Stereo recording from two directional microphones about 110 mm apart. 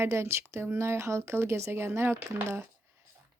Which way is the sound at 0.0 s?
25° right (ahead or behind).